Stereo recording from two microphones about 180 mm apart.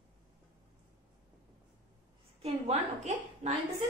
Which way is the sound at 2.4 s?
35° right (ahead or behind).